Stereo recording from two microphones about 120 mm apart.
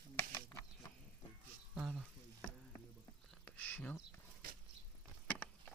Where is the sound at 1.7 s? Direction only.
10° right (ahead or behind).